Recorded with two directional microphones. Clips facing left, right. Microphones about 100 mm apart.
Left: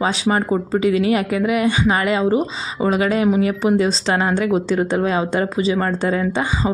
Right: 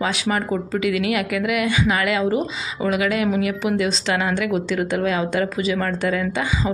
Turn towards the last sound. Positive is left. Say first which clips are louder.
# left 3 dB
turn(degrees=35)  # may be behind; listen again after turning